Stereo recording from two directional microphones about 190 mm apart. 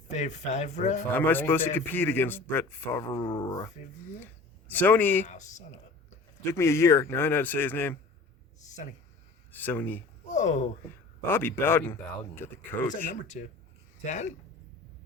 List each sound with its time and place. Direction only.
0.1 s speech: 35° left (ahead or behind)
1.1 s a man's voice: 10° left (ahead or behind)
4.7 s a man's voice: 10° left (ahead or behind)
5.2 s speech: 40° left (ahead or behind)
6.4 s a man's voice: 15° left (ahead or behind)
8.6 s speech: 40° left (ahead or behind)
9.5 s a man's voice: 10° left (ahead or behind)
10.2 s speech: 40° left (ahead or behind)
11.3 s a man's voice: 10° left (ahead or behind)
13.3 s speech: 40° left (ahead or behind)